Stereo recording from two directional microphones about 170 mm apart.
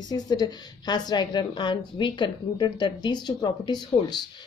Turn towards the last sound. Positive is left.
turn(degrees=25)  # may be behind; listen again after turning